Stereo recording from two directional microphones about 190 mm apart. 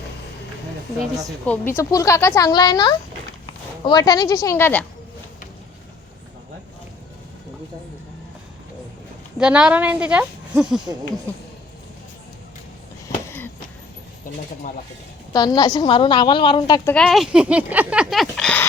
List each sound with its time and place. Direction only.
1.5 s a woman's voice: 10° left (ahead or behind)
9.4 s speech: 5° right (ahead or behind)
14.3 s speech: 45° left (ahead or behind)
15.3 s a woman's voice: 20° left (ahead or behind)
16.9 s speech: 5° left (ahead or behind)